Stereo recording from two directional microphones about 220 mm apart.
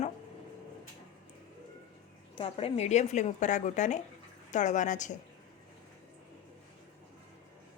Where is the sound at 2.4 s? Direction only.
25° left (ahead or behind).